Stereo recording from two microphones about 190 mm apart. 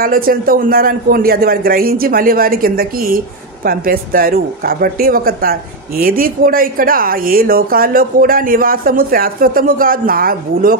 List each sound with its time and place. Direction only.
0.0 s speech: 50° right (ahead or behind)